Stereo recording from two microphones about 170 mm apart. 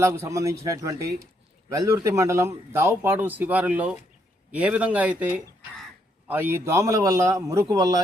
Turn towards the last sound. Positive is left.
turn(degrees=-20)  # may be behind; listen again after turning